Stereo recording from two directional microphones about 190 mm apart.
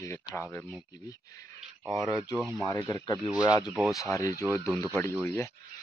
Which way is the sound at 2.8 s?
20° left (ahead or behind).